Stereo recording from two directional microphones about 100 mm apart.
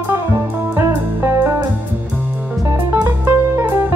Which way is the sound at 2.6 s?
30° right (ahead or behind).